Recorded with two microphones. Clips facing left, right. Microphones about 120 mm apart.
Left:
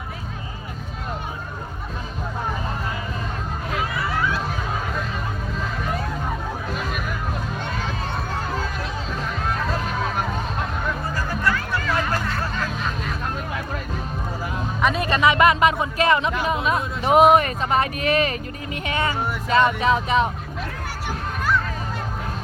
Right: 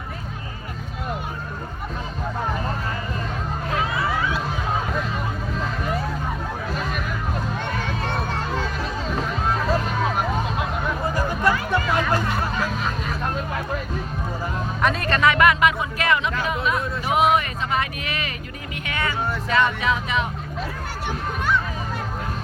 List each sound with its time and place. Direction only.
10.2 s music: 15° right (ahead or behind)
14.8 s music: 5° left (ahead or behind); by 16.3 s 30° left (ahead or behind)
17.1 s a sound: 45° left (ahead or behind)
18.9 s music: 30° left (ahead or behind)
19.8 s speech: 35° left (ahead or behind)
21.1 s a sound: centre (ahead or behind)